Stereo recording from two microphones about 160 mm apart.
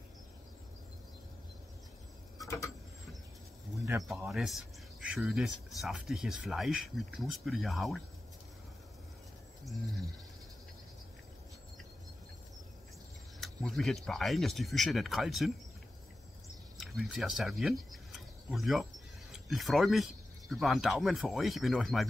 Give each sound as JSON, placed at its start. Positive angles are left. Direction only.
{"t": 2.4, "sound": "a sound", "side_deg": 20}
{"t": 4.1, "sound": "speech", "side_deg": 0}
{"t": 13.4, "sound": "speech", "side_deg": 0}
{"t": 16.7, "sound": "speech", "side_deg": 0}